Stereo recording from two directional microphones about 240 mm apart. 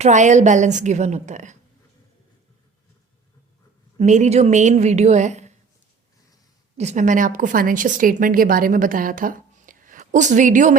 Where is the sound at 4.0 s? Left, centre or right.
Right.